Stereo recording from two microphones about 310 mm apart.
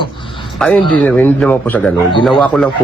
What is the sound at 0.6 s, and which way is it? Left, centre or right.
A man's voice, centre.